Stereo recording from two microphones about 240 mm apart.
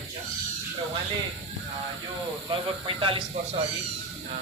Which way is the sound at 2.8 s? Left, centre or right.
Right.